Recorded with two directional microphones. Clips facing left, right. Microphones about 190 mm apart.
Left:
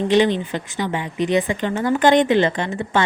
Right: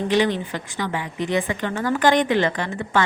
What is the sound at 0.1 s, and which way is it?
A woman's voice, 20° left (ahead or behind).